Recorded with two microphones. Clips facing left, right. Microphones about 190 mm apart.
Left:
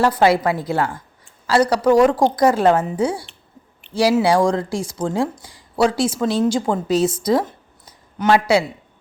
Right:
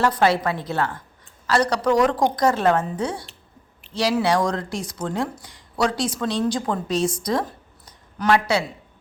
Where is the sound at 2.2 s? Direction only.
10° left (ahead or behind).